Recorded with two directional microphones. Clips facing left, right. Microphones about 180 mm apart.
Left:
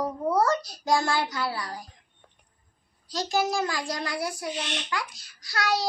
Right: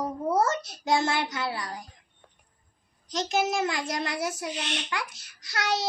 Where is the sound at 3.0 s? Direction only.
20° right (ahead or behind).